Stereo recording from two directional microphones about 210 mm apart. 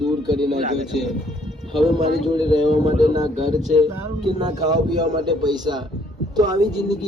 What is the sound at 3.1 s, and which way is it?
A man's voice, 20° right (ahead or behind).